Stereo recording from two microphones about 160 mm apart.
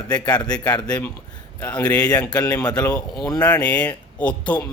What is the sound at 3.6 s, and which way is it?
Speech, 10° left (ahead or behind).